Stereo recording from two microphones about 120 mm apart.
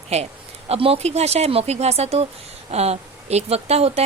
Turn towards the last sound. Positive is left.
turn(degrees=-60)  # may be behind; listen again after turning